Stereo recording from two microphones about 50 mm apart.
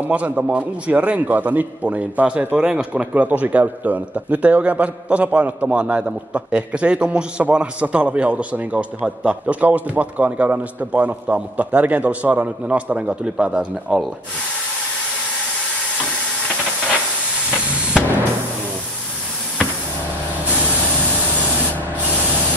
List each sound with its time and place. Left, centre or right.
0.1 s a man's voice: right